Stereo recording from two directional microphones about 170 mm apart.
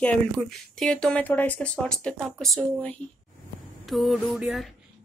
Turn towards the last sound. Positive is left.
turn(degrees=0)  # may be behind; listen again after turning